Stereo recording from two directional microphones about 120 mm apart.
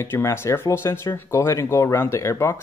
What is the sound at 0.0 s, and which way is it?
Speech, 20° left (ahead or behind).